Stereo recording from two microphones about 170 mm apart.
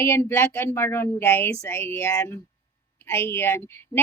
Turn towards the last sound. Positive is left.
turn(degrees=15)  # may be behind; listen again after turning